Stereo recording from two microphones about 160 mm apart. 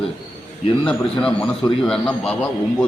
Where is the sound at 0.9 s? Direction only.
5° left (ahead or behind).